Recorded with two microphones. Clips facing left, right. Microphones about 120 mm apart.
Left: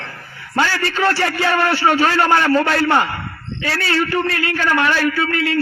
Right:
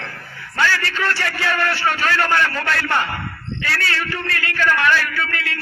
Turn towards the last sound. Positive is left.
turn(degrees=30)  # may be behind; listen again after turning